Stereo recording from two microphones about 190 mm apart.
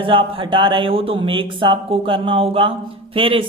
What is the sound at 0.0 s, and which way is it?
Speech, 25° right (ahead or behind).